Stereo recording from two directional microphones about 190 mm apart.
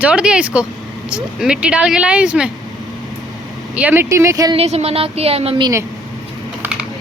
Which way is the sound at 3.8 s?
10° right (ahead or behind).